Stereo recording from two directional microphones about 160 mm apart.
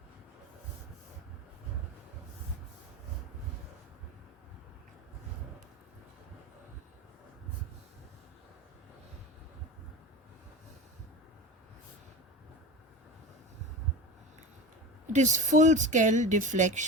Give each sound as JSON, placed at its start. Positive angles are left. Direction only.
{"t": 15.1, "sound": "speech", "side_deg": -50}